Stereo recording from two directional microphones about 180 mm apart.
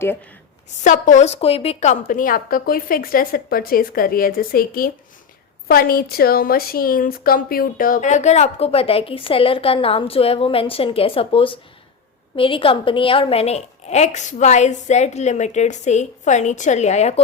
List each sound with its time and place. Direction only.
0.9 s a woman's voice: 45° left (ahead or behind)
2.0 s a woman's voice: 50° left (ahead or behind)